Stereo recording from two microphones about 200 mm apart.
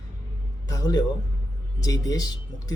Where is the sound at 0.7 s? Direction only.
20° left (ahead or behind).